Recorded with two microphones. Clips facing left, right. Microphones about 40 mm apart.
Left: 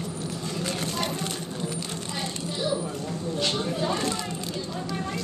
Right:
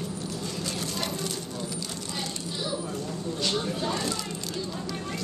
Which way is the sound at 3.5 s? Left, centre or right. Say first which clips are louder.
Left 2 dB; centre.